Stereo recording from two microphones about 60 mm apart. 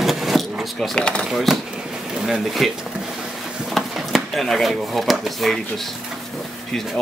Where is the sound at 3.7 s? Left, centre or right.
Centre.